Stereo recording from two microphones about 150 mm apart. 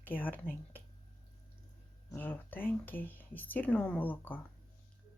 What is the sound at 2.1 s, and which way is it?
Speech, 15° left (ahead or behind).